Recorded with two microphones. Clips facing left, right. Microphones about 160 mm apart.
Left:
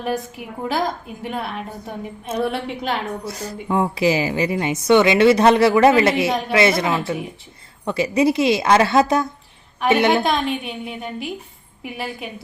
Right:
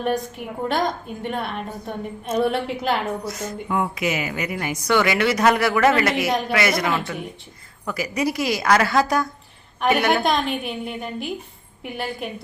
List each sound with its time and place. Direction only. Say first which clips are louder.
0.0 s a woman's voice: right 1 dB; 5° left (ahead or behind)
3.2 s a woman's voice: left 1 dB; 30° left (ahead or behind)
9.8 s a woman's voice: left 2 dB; centre (ahead or behind)